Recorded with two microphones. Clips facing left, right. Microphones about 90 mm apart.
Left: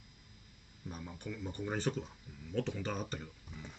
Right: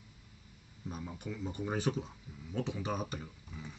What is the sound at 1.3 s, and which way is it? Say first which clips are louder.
Speech: right 2 dB; 15° right (ahead or behind).